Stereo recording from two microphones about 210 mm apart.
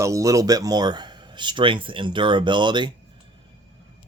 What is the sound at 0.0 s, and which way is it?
Speech, 15° right (ahead or behind).